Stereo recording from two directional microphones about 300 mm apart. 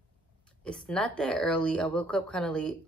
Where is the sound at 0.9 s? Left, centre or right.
Centre.